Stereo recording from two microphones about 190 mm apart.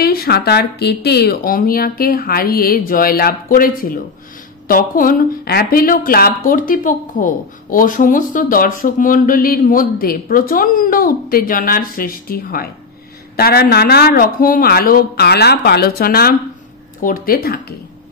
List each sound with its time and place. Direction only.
0.0 s a woman's voice: 55° left (ahead or behind)